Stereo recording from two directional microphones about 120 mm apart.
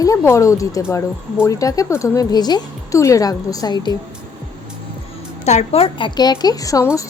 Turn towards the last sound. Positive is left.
turn(degrees=25)  # may be behind; listen again after turning